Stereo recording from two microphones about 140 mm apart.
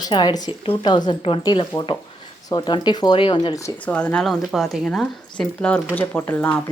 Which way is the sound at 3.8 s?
10° left (ahead or behind).